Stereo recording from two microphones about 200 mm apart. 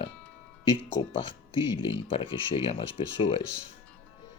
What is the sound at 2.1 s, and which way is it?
Speech, 25° left (ahead or behind).